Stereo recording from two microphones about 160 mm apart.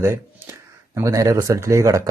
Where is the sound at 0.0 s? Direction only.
15° right (ahead or behind).